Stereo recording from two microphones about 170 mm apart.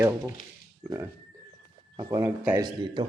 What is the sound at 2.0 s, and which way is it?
Speech, 20° right (ahead or behind).